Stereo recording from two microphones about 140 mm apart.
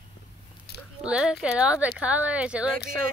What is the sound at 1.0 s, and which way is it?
Speech, 5° right (ahead or behind).